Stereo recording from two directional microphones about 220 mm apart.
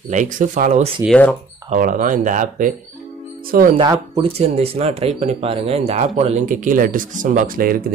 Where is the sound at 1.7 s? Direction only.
35° right (ahead or behind).